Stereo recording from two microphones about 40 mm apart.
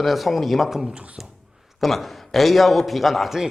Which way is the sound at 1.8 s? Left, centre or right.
Centre.